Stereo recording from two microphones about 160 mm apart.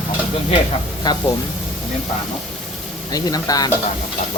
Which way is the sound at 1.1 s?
25° left (ahead or behind).